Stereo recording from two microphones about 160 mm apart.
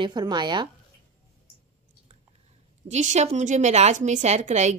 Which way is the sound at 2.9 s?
45° right (ahead or behind).